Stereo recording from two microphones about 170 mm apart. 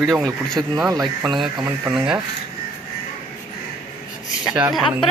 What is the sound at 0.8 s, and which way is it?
Speech, 20° right (ahead or behind).